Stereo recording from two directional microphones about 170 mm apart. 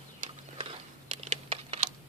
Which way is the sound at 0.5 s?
35° right (ahead or behind).